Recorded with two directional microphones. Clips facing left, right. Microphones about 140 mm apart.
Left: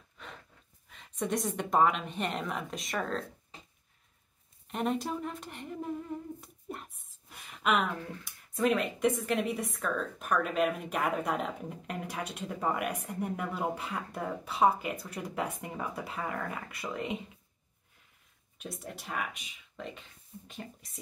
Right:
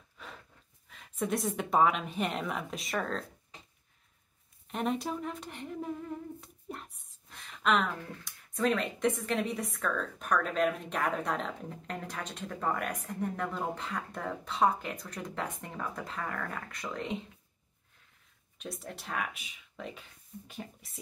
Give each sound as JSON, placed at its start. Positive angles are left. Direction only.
{"t": 0.8, "sound": "speech", "side_deg": 0}
{"t": 4.6, "sound": "speech", "side_deg": 0}
{"t": 18.6, "sound": "speech", "side_deg": 5}